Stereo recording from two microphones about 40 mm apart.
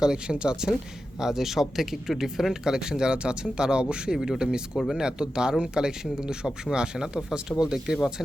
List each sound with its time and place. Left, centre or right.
0.0 s a man's voice: right
1.2 s a man's voice: centre